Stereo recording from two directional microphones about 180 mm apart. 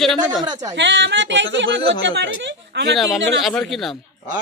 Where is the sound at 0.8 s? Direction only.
90° right.